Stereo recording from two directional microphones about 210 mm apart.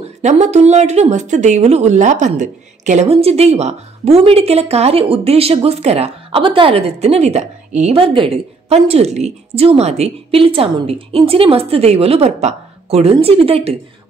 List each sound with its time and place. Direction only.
0.2 s speech: 35° right (ahead or behind)